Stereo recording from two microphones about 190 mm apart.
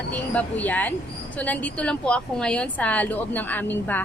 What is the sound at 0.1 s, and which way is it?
A woman's voice, 10° left (ahead or behind).